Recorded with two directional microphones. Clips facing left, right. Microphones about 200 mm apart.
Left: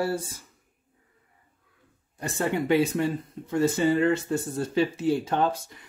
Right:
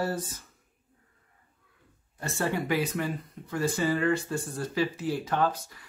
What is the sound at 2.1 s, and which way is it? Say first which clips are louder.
Speech: left 3 dB; 15° left (ahead or behind).